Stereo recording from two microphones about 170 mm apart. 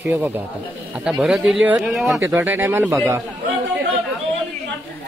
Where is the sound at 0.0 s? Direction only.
10° right (ahead or behind).